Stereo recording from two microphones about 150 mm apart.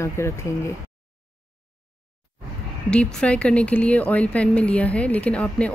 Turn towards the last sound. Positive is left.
turn(degrees=10)  # may be behind; listen again after turning